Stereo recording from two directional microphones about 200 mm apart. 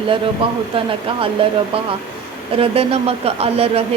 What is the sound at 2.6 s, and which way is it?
Speech, 30° right (ahead or behind).